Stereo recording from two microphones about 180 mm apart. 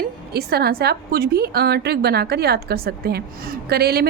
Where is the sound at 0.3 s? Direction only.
60° right (ahead or behind).